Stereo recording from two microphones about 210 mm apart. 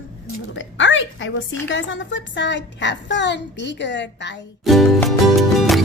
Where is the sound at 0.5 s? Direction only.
65° left (ahead or behind).